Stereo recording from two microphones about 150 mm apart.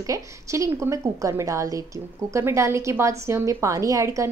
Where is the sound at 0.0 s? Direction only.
20° right (ahead or behind).